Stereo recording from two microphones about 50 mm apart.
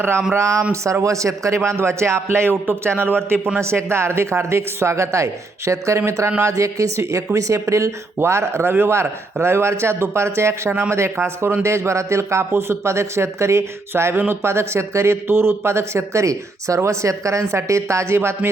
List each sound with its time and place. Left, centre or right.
0.3 s a woman's voice: right
10.7 s speech: right